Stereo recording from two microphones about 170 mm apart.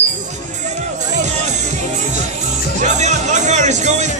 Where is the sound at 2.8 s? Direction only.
45° right (ahead or behind).